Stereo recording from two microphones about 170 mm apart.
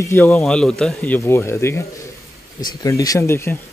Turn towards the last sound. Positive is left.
turn(degrees=15)  # may be behind; listen again after turning